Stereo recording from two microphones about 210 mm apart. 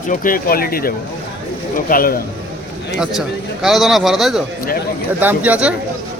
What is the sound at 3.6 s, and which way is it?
A man's voice, centre (ahead or behind).